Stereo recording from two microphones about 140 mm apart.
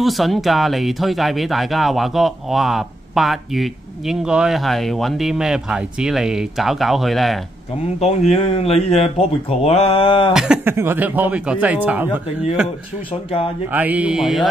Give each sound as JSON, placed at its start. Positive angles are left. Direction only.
{"t": 0.0, "sound": "speech", "side_deg": 0}
{"t": 8.0, "sound": "speech", "side_deg": 50}
{"t": 10.3, "sound": "speech", "side_deg": -5}
{"t": 10.7, "sound": "speech", "side_deg": -15}
{"t": 13.7, "sound": "speech", "side_deg": -10}